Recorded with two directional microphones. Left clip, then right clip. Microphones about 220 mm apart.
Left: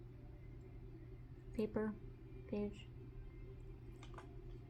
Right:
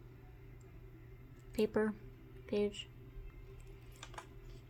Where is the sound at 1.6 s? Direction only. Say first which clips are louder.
Right 7 dB; 50° right (ahead or behind).